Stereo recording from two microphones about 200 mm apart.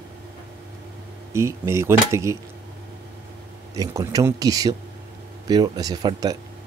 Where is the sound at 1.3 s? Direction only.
15° right (ahead or behind).